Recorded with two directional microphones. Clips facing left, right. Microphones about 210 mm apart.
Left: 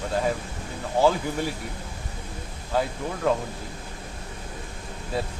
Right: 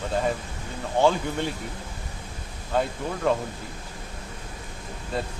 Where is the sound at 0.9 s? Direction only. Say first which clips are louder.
Even; 5° left (ahead or behind).